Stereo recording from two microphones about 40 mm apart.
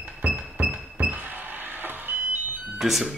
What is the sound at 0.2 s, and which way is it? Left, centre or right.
Music, right.